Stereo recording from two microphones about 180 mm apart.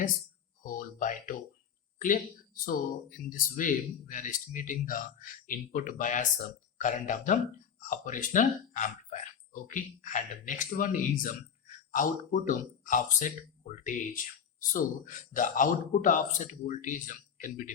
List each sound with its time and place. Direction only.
0.6 s speech: 50° left (ahead or behind)